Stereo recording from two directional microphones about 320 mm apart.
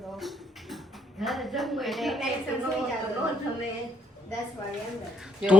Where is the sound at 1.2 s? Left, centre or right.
Centre.